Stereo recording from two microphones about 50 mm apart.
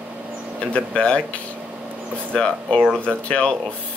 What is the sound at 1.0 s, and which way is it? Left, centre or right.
Speech, left.